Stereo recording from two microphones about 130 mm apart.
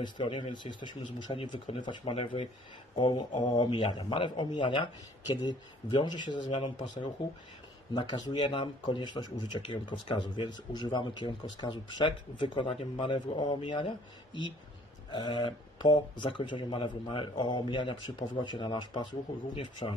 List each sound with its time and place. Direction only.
0.0 s a man's voice: 40° left (ahead or behind)
15.0 s speech: 40° left (ahead or behind)